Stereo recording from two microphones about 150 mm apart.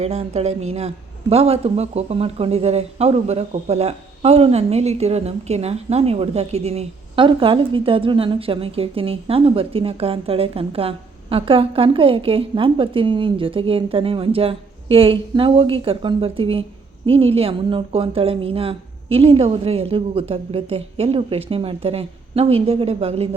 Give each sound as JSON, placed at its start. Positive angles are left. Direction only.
{"t": 0.0, "sound": "a man's voice", "side_deg": -45}